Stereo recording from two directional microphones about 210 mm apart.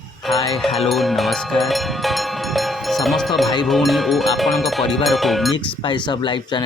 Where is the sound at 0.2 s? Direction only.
Centre (ahead or behind).